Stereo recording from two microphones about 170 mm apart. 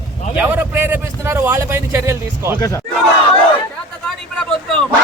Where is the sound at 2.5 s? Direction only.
20° left (ahead or behind).